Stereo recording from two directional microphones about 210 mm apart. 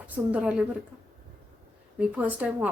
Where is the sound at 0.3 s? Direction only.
5° right (ahead or behind).